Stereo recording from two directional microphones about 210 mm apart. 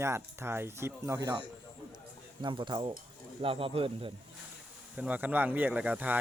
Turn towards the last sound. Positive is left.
turn(degrees=-10)  # may be behind; listen again after turning